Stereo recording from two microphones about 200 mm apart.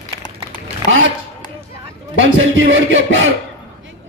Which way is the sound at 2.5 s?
75° right (ahead or behind).